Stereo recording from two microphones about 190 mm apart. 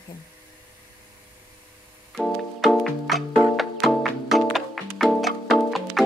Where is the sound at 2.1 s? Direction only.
Centre (ahead or behind).